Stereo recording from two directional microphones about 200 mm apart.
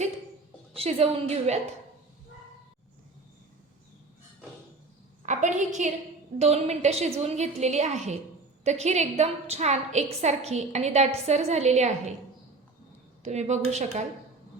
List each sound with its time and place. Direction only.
0.7 s a woman's voice: 30° right (ahead or behind)
5.2 s a woman's voice: 40° right (ahead or behind)
13.2 s a woman's voice: 35° right (ahead or behind)